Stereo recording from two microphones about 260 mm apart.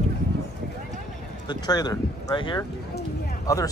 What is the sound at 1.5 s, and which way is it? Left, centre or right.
Speech, centre.